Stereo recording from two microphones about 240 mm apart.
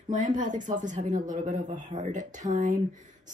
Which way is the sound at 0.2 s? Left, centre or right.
Right.